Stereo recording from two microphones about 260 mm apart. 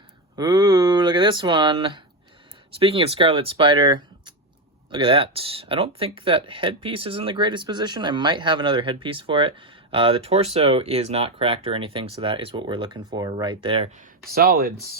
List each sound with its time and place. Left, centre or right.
0.3 s a sound: centre
2.7 s speech: right
14.3 s speech: right